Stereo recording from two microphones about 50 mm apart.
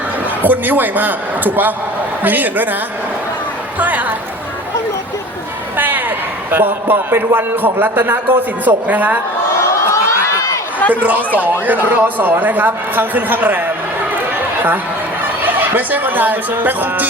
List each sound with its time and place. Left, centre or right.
0.4 s speech: right
3.8 s a woman's voice: right
5.7 s a sound: right
7.3 s speech: right
9.6 s a sound: left
11.0 s speech: right
15.4 s speech: right